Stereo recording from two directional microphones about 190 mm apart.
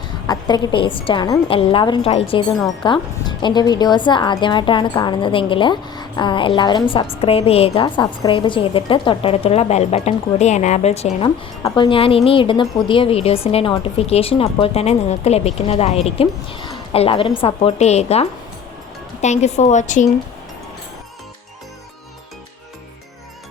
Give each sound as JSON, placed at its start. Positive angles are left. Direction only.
{"t": 0.3, "sound": "speech", "side_deg": 20}
{"t": 11.6, "sound": "a woman's voice", "side_deg": 20}